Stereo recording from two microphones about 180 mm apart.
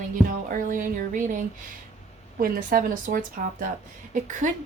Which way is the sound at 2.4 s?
50° right (ahead or behind).